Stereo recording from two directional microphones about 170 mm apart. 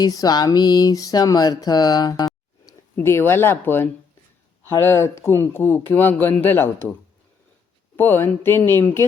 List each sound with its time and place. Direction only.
0.0 s a sound: 20° left (ahead or behind)
4.6 s speech: 15° left (ahead or behind)
7.9 s speech: 10° left (ahead or behind)